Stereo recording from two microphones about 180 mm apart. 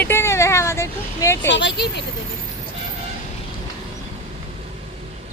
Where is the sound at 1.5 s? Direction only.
80° left.